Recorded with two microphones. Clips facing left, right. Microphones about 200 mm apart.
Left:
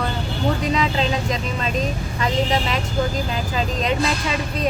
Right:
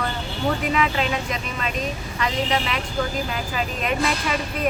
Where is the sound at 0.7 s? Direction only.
30° left (ahead or behind).